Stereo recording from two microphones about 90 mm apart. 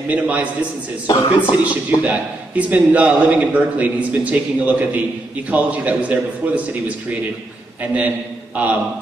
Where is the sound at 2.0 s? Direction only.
15° right (ahead or behind).